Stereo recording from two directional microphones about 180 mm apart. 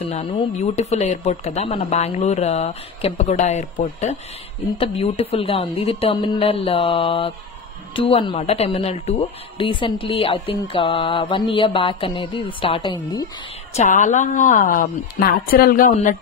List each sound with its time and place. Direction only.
0.0 s speech: 35° left (ahead or behind)
13.7 s a woman's voice: 45° left (ahead or behind)